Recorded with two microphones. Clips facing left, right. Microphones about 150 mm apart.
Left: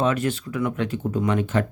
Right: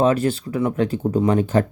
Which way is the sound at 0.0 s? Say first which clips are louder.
Right 5 dB; 35° right (ahead or behind).